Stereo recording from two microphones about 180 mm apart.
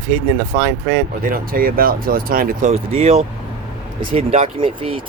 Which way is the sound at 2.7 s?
35° right (ahead or behind).